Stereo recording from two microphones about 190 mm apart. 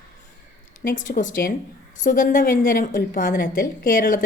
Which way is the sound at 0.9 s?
45° left (ahead or behind).